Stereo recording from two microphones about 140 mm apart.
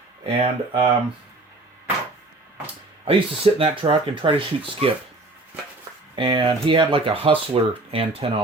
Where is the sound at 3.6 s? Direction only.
40° right (ahead or behind).